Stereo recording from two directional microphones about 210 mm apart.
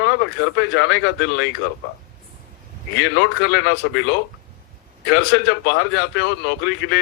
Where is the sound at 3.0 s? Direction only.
55° left (ahead or behind).